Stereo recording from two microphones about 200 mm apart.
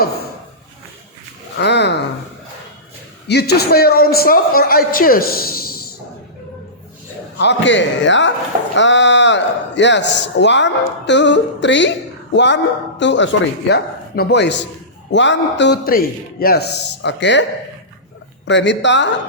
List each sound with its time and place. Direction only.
1.5 s a sound: 60° left (ahead or behind)
3.2 s a man's voice: 55° left (ahead or behind)
7.3 s a man's voice: 60° left (ahead or behind)
18.4 s a man's voice: 60° left (ahead or behind)